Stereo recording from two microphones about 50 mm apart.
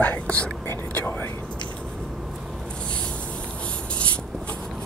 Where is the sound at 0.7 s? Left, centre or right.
Left.